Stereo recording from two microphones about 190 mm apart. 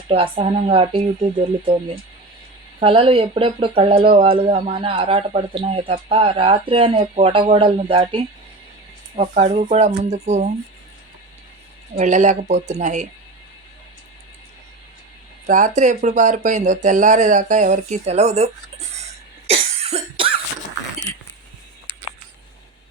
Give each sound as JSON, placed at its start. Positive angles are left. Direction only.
{"t": 0.1, "sound": "speech", "side_deg": -30}
{"t": 2.8, "sound": "speech", "side_deg": -30}
{"t": 11.9, "sound": "speech", "side_deg": -40}
{"t": 15.4, "sound": "speech", "side_deg": -40}
{"t": 19.5, "sound": "cough", "side_deg": -35}